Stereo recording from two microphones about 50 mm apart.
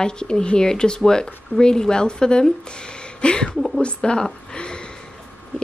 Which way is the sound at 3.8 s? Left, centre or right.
Centre.